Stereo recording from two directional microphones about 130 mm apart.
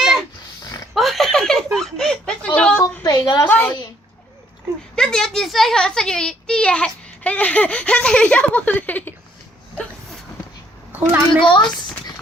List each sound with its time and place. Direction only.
0.0 s dog: centre (ahead or behind)
0.9 s snicker: centre (ahead or behind)
2.6 s a sound: 10° left (ahead or behind)
3.0 s a sound: 30° left (ahead or behind)
3.4 s a child's voice: 15° left (ahead or behind)
4.9 s a child's voice: 5° left (ahead or behind)
10.9 s a woman's voice: 15° right (ahead or behind)
11.3 s a child's voice: 40° left (ahead or behind)